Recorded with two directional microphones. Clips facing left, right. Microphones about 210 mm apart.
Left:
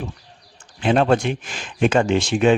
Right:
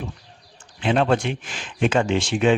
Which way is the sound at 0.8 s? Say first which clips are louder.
Left 3 dB; 45° left (ahead or behind).